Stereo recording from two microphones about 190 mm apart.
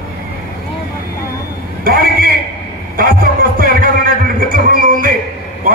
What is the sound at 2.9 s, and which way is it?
Music, 50° right (ahead or behind).